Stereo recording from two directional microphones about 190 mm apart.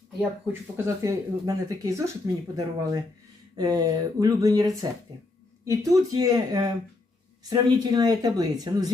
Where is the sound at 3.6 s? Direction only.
20° right (ahead or behind).